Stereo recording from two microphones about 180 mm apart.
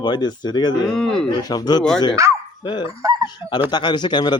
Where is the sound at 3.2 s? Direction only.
25° left (ahead or behind).